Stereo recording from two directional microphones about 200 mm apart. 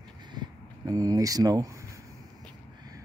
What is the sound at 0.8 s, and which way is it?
Speech, 15° right (ahead or behind).